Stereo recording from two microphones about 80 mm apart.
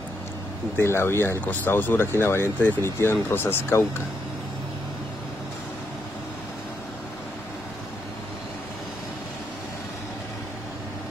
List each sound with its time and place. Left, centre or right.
0.7 s speech: left